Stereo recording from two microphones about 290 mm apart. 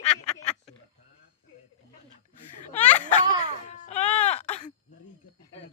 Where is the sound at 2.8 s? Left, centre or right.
Left.